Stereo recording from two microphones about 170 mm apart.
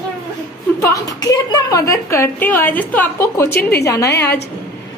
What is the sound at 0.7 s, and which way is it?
A woman's voice, 20° left (ahead or behind).